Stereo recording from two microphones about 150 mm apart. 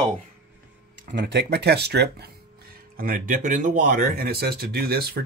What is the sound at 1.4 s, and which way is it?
Speech, 90° right.